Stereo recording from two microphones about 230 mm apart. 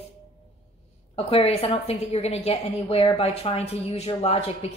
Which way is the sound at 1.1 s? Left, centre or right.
Left.